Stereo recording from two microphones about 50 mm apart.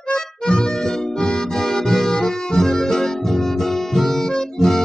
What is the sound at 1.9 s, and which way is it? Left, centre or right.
Music, centre.